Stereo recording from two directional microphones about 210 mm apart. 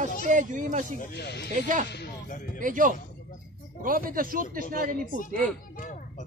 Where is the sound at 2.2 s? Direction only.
35° left (ahead or behind).